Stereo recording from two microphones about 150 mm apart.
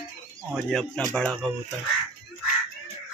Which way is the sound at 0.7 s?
5° left (ahead or behind).